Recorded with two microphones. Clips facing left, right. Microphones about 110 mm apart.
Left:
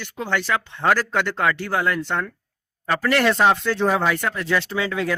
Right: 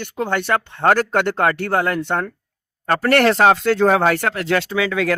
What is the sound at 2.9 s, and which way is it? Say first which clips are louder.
Speech: right 4 dB; 60° right (ahead or behind).